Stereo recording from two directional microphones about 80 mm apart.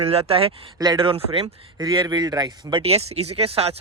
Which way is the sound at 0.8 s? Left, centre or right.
Right.